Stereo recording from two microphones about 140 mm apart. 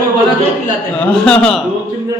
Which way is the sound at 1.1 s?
5° left (ahead or behind).